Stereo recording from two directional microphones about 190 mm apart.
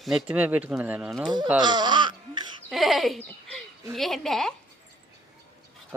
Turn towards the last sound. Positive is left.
turn(degrees=0)  # may be behind; listen again after turning